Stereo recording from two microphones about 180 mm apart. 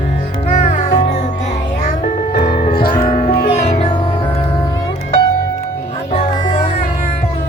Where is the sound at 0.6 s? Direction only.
40° left (ahead or behind).